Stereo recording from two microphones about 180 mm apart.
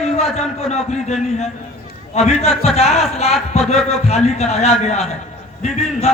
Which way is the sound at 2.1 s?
35° left (ahead or behind).